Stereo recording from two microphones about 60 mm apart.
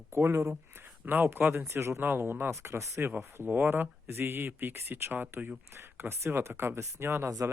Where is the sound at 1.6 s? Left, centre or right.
Right.